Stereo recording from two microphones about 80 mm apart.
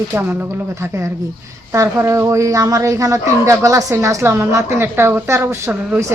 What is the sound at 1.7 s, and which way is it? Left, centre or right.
Speech, right.